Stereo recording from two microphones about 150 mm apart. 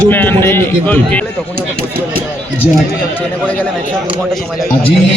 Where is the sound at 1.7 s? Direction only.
75° right (ahead or behind).